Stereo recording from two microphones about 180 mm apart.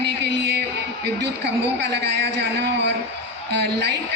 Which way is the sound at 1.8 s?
70° right (ahead or behind).